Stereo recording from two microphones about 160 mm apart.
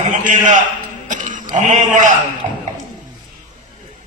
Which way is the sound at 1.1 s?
50° right (ahead or behind).